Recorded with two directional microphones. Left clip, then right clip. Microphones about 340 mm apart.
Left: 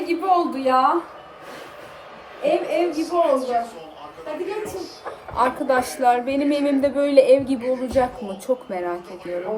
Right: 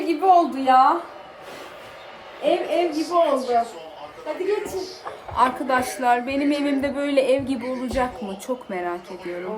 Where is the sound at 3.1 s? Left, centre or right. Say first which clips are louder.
Right 1 dB; right.